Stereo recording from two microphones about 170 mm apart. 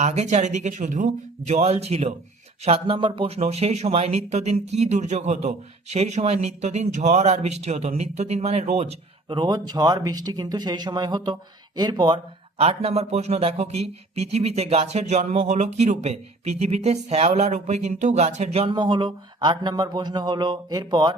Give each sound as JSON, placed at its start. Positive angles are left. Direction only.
{"t": 0.0, "sound": "speech", "side_deg": -40}
{"t": 9.3, "sound": "speech", "side_deg": -25}